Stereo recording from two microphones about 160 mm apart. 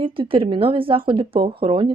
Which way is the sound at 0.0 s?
35° right (ahead or behind).